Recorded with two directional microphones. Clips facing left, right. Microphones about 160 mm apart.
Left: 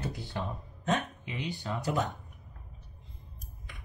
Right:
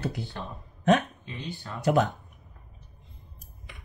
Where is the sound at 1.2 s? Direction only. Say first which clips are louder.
Left 1 dB; 15° left (ahead or behind).